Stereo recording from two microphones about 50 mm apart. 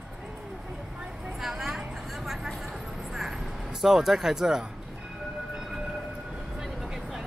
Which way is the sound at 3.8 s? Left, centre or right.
Centre.